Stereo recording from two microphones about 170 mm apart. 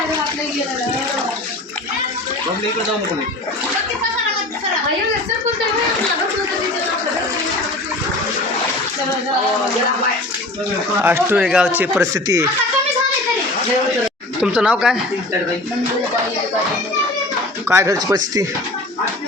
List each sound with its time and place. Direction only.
11.0 s speech: 15° right (ahead or behind)
14.4 s speech: 5° right (ahead or behind)
17.7 s speech: 20° right (ahead or behind)